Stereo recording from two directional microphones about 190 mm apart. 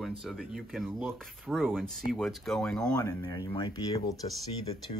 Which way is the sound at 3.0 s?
20° left (ahead or behind).